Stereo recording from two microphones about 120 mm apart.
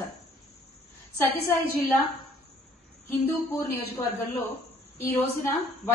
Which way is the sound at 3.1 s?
20° left (ahead or behind).